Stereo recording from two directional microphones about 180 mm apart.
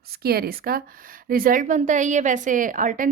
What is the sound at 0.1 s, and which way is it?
A woman's voice, 60° right (ahead or behind).